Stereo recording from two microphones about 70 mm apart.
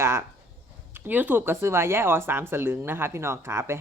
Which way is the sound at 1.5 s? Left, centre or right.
Right.